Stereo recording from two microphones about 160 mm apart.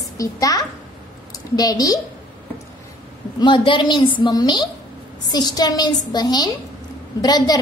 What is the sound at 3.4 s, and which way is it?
A woman's voice, 30° left (ahead or behind).